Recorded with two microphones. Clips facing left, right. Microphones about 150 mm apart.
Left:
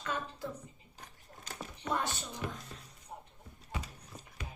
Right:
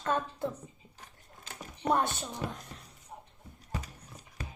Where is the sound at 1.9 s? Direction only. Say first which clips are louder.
Right 6 dB; 55° right (ahead or behind).